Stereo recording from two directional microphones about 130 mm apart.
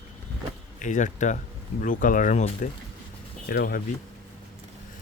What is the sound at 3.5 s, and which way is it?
Speech, 90° left.